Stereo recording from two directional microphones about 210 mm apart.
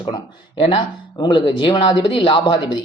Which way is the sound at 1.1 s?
20° left (ahead or behind).